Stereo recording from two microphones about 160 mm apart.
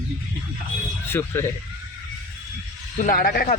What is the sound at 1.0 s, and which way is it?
Speech, 15° left (ahead or behind).